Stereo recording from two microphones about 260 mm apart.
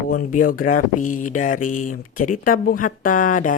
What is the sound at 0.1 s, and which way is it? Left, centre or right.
Speech, left.